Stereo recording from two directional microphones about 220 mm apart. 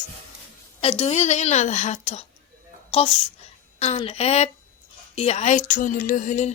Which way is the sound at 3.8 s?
25° left (ahead or behind).